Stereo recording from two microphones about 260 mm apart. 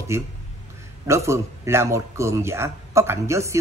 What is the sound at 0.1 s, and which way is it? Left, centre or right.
A man's voice, centre.